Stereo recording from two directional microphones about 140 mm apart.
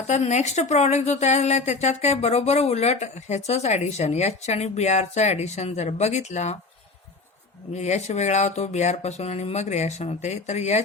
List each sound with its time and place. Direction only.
0.1 s a woman's voice: 55° left (ahead or behind)
7.8 s a woman's voice: 55° left (ahead or behind)